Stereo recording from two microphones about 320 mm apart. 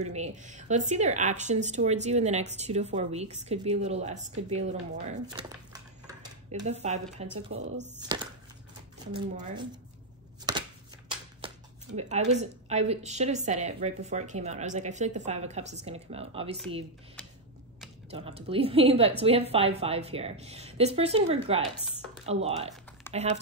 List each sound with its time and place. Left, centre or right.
0.0 s speech: right
7.3 s speech: right
8.0 s speech: centre
10.5 s chopping: centre
11.1 s speech: centre
18.1 s a woman's voice: centre